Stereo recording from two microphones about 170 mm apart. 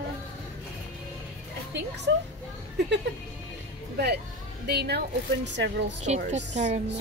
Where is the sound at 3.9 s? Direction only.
70° right (ahead or behind); by 5.7 s 90° right.